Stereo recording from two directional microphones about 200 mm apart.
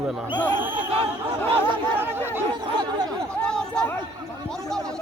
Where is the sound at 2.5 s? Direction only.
20° right (ahead or behind).